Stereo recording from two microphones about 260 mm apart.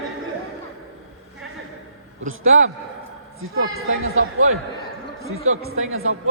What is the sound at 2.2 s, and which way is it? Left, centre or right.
Speech, right.